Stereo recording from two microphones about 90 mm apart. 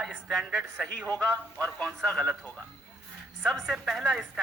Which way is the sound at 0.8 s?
15° left (ahead or behind).